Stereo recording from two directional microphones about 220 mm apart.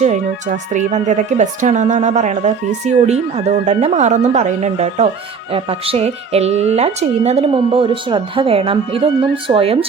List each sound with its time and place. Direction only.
0.0 s speech: 35° right (ahead or behind)